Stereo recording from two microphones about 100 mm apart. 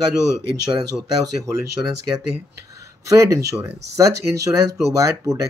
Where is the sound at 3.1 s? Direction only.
35° right (ahead or behind).